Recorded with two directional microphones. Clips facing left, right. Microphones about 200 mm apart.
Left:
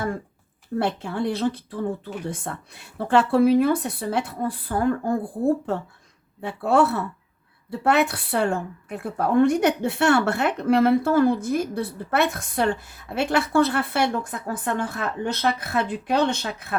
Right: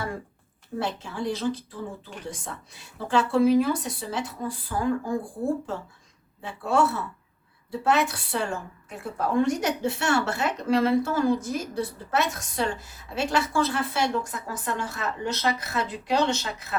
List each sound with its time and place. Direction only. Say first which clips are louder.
0.8 s a woman's voice: left 5 dB; 60° left (ahead or behind)